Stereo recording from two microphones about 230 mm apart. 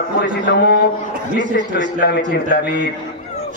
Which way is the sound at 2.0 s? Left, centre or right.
Left.